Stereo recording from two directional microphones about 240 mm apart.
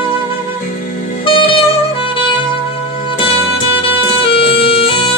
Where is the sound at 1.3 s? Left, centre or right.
Left.